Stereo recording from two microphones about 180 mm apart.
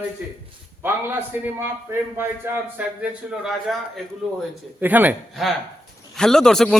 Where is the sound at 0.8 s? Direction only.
10° right (ahead or behind).